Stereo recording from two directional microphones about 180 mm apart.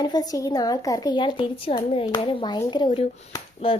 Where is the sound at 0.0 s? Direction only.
20° left (ahead or behind).